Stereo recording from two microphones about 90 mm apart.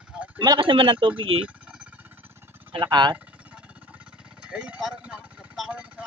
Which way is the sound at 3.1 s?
15° right (ahead or behind).